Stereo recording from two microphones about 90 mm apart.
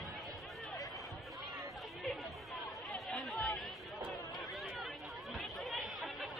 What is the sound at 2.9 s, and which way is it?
Chatter, 10° left (ahead or behind).